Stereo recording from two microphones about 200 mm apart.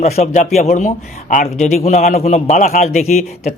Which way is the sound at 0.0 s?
35° left (ahead or behind).